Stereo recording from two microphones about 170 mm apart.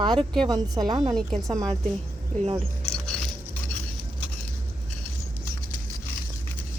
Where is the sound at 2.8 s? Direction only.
5° left (ahead or behind).